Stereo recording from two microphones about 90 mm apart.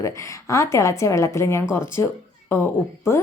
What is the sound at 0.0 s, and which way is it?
A woman's voice, 35° left (ahead or behind).